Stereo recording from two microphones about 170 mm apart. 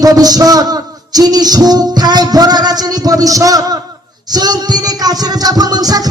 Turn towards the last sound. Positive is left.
turn(degrees=-20)  # may be behind; listen again after turning